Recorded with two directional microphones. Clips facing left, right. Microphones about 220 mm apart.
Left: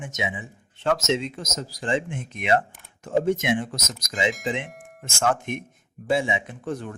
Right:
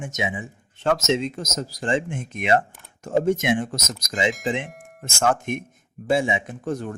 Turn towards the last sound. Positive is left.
turn(degrees=-40)  # may be behind; listen again after turning